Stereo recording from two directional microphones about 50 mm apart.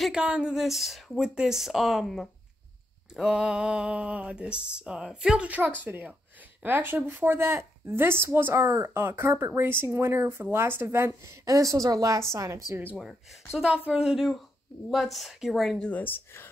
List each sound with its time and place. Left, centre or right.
0.1 s a woman's voice: centre
0.6 s speech: centre
1.2 s speech: centre
3.3 s speech: centre
5.9 s a woman's voice: right
7.2 s speech: right
8.5 s speech: right
8.8 s speech: right
11.6 s a woman's voice: right
13.5 s a woman's voice: centre
14.9 s speech: centre
15.9 s speech: left